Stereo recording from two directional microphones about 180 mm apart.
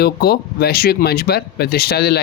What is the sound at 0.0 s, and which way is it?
Speech, 60° left (ahead or behind).